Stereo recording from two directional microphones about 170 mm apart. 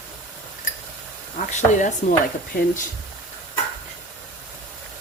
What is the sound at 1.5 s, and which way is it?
Speech, 45° left (ahead or behind).